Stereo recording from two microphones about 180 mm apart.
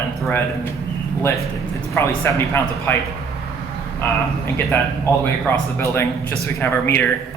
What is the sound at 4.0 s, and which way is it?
Speech, 10° left (ahead or behind).